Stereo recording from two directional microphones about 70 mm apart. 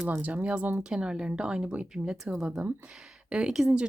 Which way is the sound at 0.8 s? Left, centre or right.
Centre.